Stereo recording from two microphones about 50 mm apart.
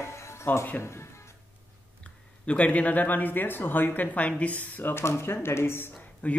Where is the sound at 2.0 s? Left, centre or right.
Left.